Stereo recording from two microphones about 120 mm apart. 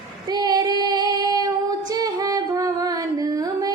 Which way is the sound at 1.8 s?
30° right (ahead or behind).